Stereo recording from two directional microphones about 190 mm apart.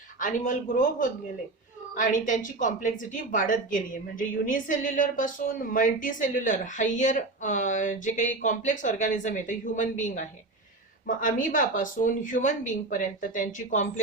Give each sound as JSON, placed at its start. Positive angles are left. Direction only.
{"t": 0.2, "sound": "a woman's voice", "side_deg": 45}